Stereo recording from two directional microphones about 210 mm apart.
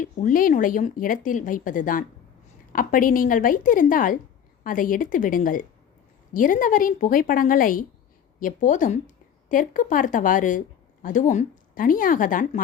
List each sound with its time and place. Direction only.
0.0 s speech: 40° left (ahead or behind)